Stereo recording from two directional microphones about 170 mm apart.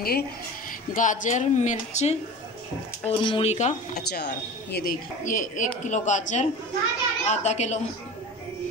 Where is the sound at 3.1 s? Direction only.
30° left (ahead or behind).